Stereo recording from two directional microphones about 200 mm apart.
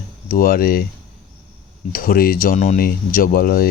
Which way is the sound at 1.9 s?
45° left (ahead or behind).